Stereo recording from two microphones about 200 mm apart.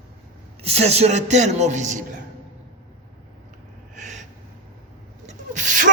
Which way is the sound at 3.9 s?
35° right (ahead or behind).